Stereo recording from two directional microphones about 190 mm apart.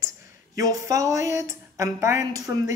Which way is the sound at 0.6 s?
20° right (ahead or behind).